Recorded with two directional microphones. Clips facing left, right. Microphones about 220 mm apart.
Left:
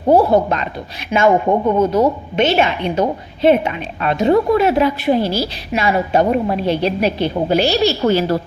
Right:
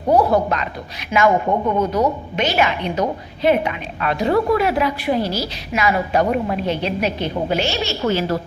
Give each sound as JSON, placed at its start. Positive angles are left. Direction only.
{"t": 0.1, "sound": "a woman's voice", "side_deg": 25}